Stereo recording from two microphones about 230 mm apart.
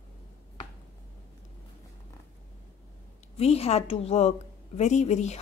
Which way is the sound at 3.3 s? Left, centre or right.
Left.